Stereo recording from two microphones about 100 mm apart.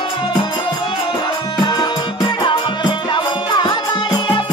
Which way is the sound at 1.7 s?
45° left (ahead or behind).